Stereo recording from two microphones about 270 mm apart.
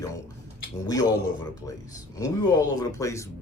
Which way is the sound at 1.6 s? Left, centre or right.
Centre.